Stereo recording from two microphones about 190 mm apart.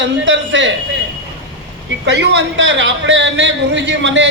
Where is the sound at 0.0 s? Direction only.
70° right (ahead or behind).